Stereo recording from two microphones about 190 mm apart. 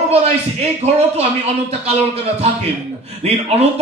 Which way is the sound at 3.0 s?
35° right (ahead or behind).